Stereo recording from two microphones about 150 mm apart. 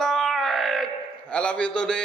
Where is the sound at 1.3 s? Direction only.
10° left (ahead or behind).